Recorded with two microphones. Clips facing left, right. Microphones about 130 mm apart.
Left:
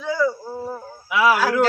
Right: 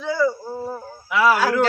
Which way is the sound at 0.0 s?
5° right (ahead or behind).